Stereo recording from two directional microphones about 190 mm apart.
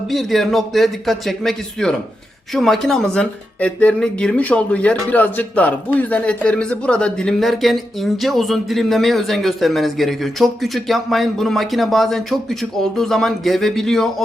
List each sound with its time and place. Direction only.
0.1 s a man's voice: centre (ahead or behind)